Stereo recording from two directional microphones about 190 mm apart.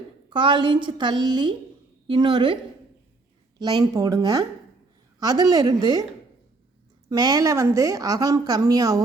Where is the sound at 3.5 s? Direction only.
20° right (ahead or behind).